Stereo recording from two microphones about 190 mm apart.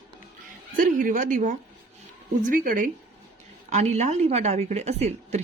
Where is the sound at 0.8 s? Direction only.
45° right (ahead or behind).